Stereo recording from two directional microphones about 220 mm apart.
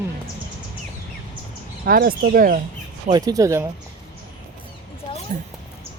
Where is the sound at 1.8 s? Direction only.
40° right (ahead or behind).